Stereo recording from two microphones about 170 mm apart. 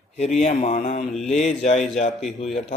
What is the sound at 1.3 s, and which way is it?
Speech, 40° left (ahead or behind).